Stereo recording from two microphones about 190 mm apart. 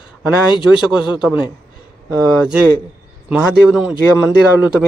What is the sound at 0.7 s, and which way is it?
Speech, 5° right (ahead or behind).